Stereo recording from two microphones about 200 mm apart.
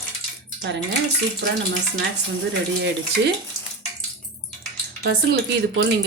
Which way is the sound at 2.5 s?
60° right (ahead or behind).